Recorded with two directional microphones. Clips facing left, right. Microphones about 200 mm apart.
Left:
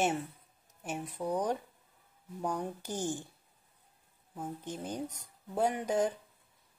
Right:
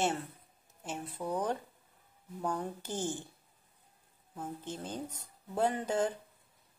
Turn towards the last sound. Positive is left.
turn(degrees=15)  # may be behind; listen again after turning